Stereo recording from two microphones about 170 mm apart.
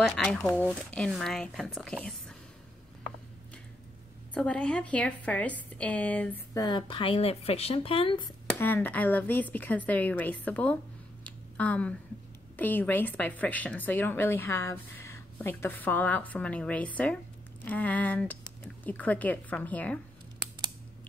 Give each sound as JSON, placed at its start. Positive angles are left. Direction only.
{"t": 0.0, "sound": "speech", "side_deg": 5}
{"t": 4.3, "sound": "a woman's voice", "side_deg": 5}
{"t": 6.5, "sound": "speech", "side_deg": 25}
{"t": 8.5, "sound": "a woman's voice", "side_deg": 10}
{"t": 11.2, "sound": "a sound", "side_deg": 10}
{"t": 12.5, "sound": "a woman's voice", "side_deg": 10}